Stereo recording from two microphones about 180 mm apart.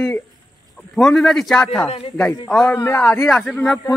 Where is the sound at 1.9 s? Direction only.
30° left (ahead or behind).